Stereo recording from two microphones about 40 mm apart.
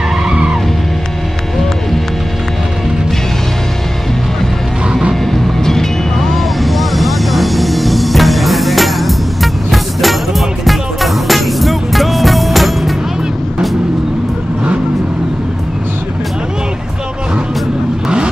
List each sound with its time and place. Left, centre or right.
0.2 s vehicle: centre
5.2 s music: centre
18.0 s vehicle: right